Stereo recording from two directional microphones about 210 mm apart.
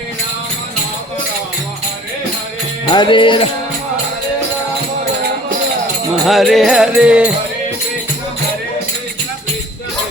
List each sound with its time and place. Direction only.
2.8 s music: 20° left (ahead or behind)
6.2 s music: centre (ahead or behind)